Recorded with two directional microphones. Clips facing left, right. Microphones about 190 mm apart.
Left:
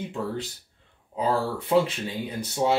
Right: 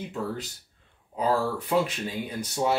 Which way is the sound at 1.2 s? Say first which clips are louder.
Even; 30° left (ahead or behind).